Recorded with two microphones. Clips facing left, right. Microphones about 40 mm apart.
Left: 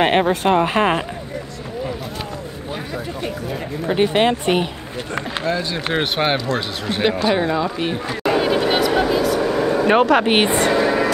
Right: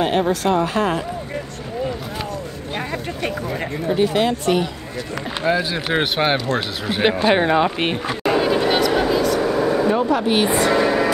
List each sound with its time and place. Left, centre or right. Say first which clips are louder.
0.0 s speech: left 2 dB; left
3.8 s speech: left 2 dB; left
5.4 s speech: right 4 dB; centre
7.2 s speech: right 2 dB; right
8.2 s a sound: left 1 dB; centre
9.8 s speech: left 4 dB; left
10.2 s speech: left 1 dB; left
10.7 s music: even; centre